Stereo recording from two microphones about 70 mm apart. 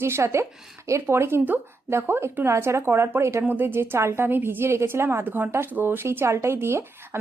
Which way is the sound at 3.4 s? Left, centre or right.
Right.